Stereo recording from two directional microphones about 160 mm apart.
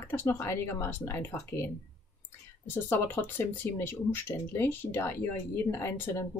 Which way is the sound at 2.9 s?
15° left (ahead or behind).